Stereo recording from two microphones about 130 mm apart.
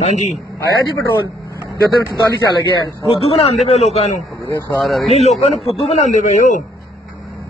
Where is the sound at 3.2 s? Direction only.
50° left (ahead or behind); by 6.6 s 70° left (ahead or behind).